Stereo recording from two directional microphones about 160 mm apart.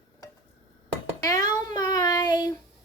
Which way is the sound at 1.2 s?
25° left (ahead or behind).